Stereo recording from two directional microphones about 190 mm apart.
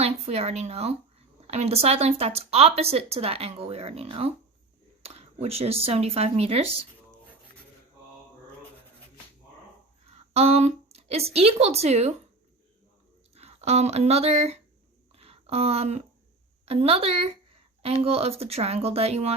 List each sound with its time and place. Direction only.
0.0 s speech: 35° right (ahead or behind)
10.1 s a woman's voice: 35° right (ahead or behind)
13.3 s speech: 35° right (ahead or behind)
15.1 s a sound: 30° right (ahead or behind)
16.6 s speech: 30° right (ahead or behind)